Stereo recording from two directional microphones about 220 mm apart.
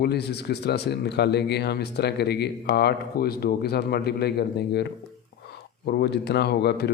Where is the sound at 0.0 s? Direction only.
45° left (ahead or behind).